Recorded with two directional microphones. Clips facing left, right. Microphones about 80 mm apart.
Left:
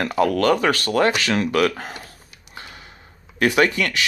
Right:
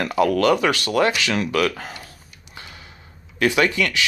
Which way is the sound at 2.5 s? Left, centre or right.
Left.